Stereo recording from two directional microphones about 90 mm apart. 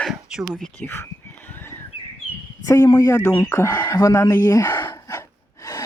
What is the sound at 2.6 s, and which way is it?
A man's voice, 35° left (ahead or behind).